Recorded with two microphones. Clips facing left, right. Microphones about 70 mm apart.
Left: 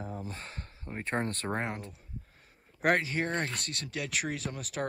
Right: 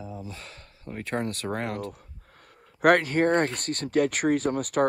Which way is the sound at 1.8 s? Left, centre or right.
Right.